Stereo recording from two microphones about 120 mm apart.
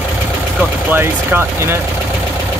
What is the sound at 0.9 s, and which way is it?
Speech, 20° right (ahead or behind).